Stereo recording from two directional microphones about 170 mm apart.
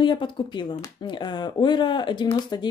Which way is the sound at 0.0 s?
30° left (ahead or behind).